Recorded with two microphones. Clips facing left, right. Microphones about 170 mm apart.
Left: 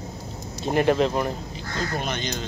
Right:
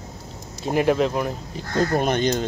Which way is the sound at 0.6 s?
Centre (ahead or behind).